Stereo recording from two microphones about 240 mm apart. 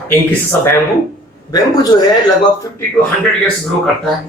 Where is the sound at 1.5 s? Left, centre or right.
Centre.